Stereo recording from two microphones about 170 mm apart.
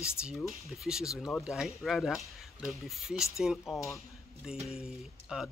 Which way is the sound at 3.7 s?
15° left (ahead or behind).